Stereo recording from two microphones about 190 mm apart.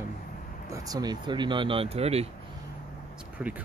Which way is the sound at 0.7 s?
20° right (ahead or behind).